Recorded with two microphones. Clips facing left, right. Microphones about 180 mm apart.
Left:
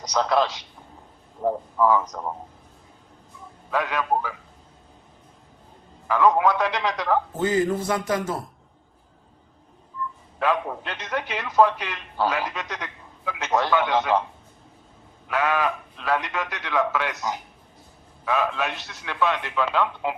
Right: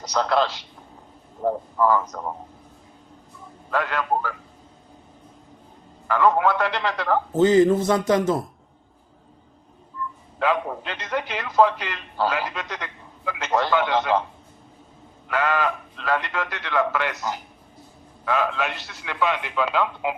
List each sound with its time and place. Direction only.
0.0 s a man's voice: 5° right (ahead or behind)
3.7 s a man's voice: 5° left (ahead or behind)
6.1 s a man's voice: centre (ahead or behind)
7.4 s a sound: 25° right (ahead or behind)
10.4 s a man's voice: centre (ahead or behind)
11.5 s a man's voice: 5° left (ahead or behind)
15.3 s a man's voice: centre (ahead or behind)